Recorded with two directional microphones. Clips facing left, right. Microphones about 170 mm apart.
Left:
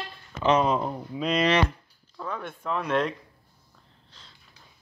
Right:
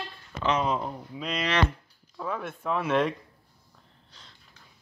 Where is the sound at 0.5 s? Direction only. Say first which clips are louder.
Left 5 dB; 50° left (ahead or behind).